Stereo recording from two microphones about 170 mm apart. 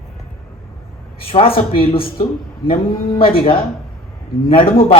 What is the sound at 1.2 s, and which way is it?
Speech, 35° left (ahead or behind).